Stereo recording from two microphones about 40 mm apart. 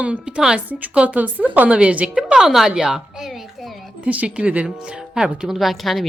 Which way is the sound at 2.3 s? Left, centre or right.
Centre.